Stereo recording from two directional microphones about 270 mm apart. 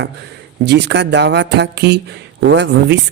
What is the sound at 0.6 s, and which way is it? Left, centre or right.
A man's voice, right.